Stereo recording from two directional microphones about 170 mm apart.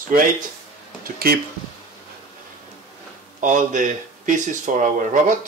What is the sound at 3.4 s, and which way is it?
Speech, 45° right (ahead or behind).